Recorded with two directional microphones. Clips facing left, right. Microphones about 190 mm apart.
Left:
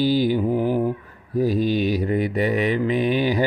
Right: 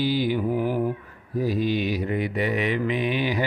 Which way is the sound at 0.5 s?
20° left (ahead or behind).